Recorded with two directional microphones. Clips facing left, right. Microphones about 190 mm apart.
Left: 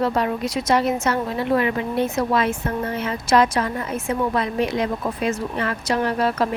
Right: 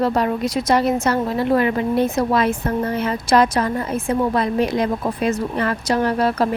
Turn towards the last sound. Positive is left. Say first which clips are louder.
# right 2 dB
turn(degrees=-35)  # may be behind; listen again after turning